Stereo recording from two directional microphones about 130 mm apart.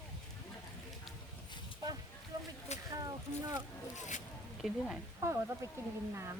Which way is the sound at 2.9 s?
30° right (ahead or behind).